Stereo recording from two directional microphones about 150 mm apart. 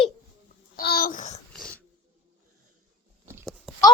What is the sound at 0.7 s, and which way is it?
Babbling, 90° left.